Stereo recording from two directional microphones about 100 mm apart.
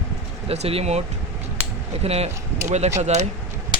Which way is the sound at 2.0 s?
90° right.